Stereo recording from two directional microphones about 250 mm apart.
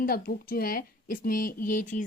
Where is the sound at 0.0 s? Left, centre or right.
Left.